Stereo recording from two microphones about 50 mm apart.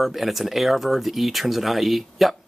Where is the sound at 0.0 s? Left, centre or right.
Centre.